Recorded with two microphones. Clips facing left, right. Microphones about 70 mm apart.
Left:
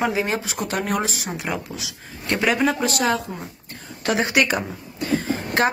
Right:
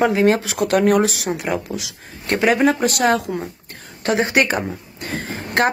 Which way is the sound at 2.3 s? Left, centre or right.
Right.